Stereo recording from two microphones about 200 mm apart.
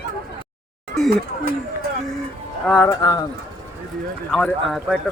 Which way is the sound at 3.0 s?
20° left (ahead or behind).